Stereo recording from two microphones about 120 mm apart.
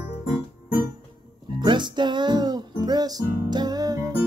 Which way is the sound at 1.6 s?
40° right (ahead or behind).